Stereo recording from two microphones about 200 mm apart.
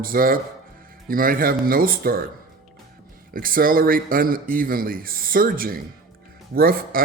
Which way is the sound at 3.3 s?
45° right (ahead or behind).